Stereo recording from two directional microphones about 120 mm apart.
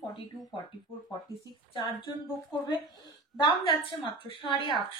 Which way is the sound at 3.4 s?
45° left (ahead or behind).